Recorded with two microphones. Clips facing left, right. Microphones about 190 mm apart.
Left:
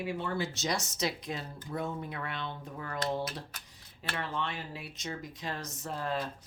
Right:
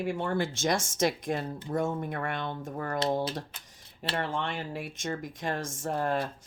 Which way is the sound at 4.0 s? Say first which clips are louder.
Right 6 dB; 70° right (ahead or behind).